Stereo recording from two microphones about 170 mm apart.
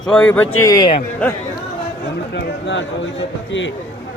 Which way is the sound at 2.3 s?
90° left.